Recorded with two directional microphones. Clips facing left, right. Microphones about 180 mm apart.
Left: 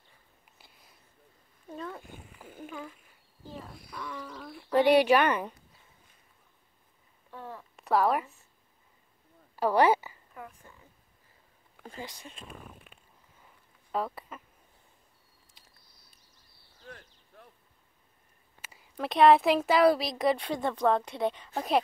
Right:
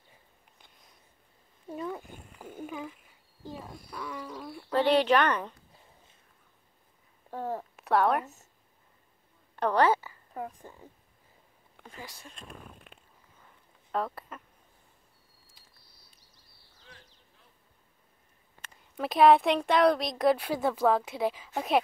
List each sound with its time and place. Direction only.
0.6 s a sound: 5° left (ahead or behind)
1.7 s a sound: 15° right (ahead or behind)
3.4 s speech: 10° right (ahead or behind)
4.6 s speech: 10° left (ahead or behind)
7.2 s a sound: 40° right (ahead or behind)
7.7 s a woman's voice: centre (ahead or behind)
9.6 s a sound: 10° left (ahead or behind)
10.3 s a woman's voice: 35° right (ahead or behind)
11.8 s speech: 30° left (ahead or behind)
12.1 s speech: 20° left (ahead or behind)
12.4 s speech: centre (ahead or behind)
18.6 s a woman's voice: 5° left (ahead or behind)